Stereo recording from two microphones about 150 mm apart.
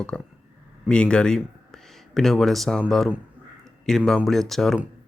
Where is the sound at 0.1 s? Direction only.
5° left (ahead or behind).